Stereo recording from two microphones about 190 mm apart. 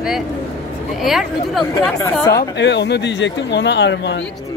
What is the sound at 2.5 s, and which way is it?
A man's voice, 65° left (ahead or behind).